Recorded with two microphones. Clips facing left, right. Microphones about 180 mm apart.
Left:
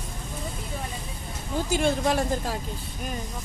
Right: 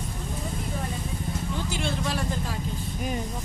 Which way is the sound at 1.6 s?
45° left (ahead or behind).